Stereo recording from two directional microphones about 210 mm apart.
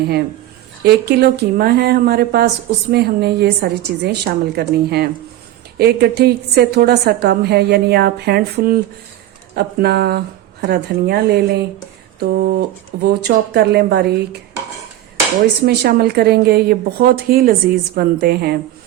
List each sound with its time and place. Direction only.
0.9 s a woman's voice: 50° right (ahead or behind)
15.6 s a woman's voice: 50° right (ahead or behind)